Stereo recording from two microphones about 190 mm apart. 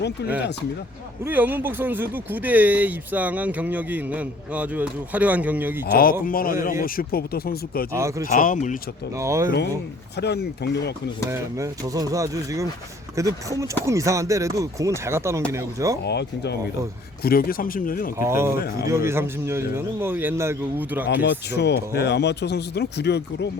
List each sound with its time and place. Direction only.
1.2 s speech: 10° right (ahead or behind)
5.9 s speech: 50° left (ahead or behind)
9.1 s speech: 15° right (ahead or behind)
10.2 s speech: 60° left (ahead or behind)
11.3 s speech: 15° right (ahead or behind)
16.0 s speech: 60° left (ahead or behind)
18.2 s speech: 15° right (ahead or behind)
21.1 s speech: 60° left (ahead or behind)